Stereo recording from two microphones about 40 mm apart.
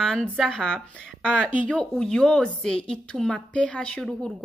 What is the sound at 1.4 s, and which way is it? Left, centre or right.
Speech, right.